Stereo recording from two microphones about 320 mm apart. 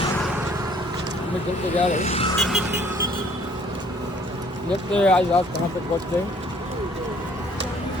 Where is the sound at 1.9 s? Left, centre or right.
Left.